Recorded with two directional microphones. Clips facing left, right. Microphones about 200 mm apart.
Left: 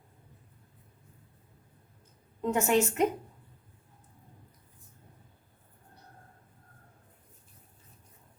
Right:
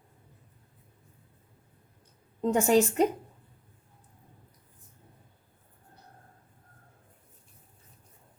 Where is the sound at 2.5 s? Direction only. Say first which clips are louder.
Right 3 dB; 35° right (ahead or behind).